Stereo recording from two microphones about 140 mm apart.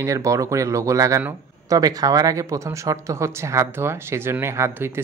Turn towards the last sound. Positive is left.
turn(degrees=-15)  # may be behind; listen again after turning